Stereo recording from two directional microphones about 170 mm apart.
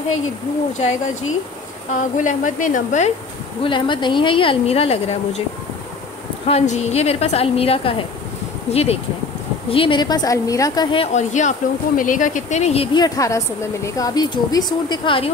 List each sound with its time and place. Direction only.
0.7 s speech: 45° left (ahead or behind)
3.6 s a woman's voice: 30° left (ahead or behind)
6.4 s a woman's voice: 40° left (ahead or behind)
11.1 s a woman's voice: 45° left (ahead or behind)